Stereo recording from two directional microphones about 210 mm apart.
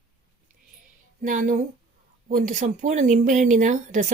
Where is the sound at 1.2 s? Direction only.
40° right (ahead or behind).